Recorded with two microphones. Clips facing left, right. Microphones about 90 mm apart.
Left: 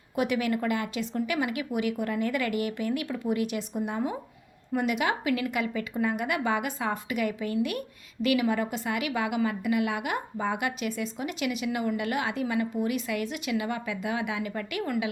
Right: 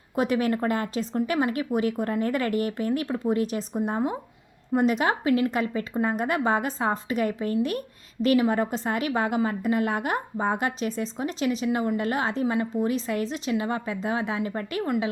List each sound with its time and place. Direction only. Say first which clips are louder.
0.2 s a woman's voice: right 3 dB; 35° right (ahead or behind)